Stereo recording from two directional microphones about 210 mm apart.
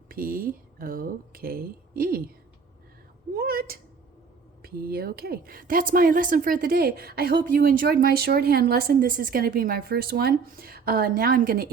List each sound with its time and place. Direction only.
0.1 s speech: 45° right (ahead or behind)
3.3 s a woman's voice: 45° right (ahead or behind)